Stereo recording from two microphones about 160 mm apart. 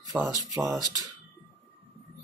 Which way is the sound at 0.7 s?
20° right (ahead or behind).